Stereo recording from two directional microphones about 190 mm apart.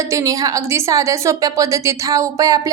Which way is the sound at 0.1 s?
15° right (ahead or behind).